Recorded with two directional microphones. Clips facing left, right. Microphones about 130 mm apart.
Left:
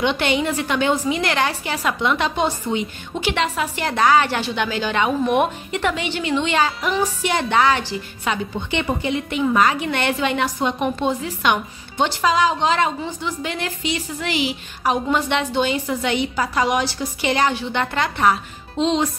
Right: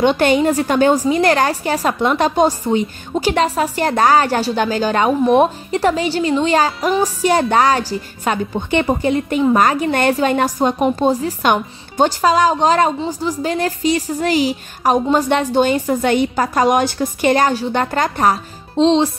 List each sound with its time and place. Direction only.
0.0 s a woman's voice: 45° right (ahead or behind)